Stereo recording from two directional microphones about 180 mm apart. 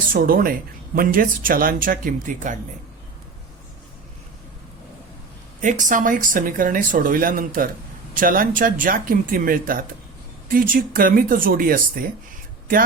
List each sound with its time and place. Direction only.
0.1 s speech: 50° right (ahead or behind)
5.6 s speech: 45° right (ahead or behind)